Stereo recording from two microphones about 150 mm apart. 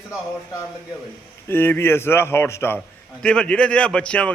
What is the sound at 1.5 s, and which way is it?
A man's voice, 15° left (ahead or behind).